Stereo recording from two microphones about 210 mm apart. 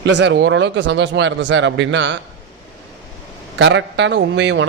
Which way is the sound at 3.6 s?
60° right (ahead or behind).